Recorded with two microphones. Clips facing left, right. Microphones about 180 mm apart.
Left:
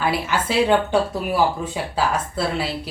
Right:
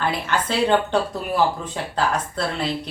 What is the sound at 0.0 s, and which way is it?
A woman's voice, 5° left (ahead or behind).